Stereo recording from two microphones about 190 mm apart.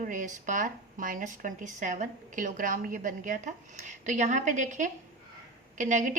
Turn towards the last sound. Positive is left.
turn(degrees=-40)  # may be behind; listen again after turning